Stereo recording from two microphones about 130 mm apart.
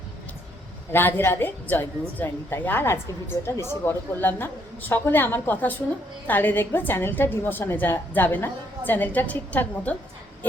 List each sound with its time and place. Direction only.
0.9 s a woman's voice: 15° left (ahead or behind)